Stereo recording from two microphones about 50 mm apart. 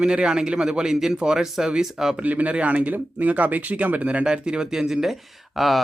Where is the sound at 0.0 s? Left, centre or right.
Centre.